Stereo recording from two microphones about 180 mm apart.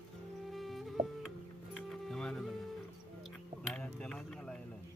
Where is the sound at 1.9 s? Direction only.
5° left (ahead or behind).